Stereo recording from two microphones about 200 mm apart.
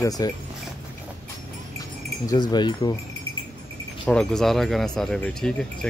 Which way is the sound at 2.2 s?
20° left (ahead or behind).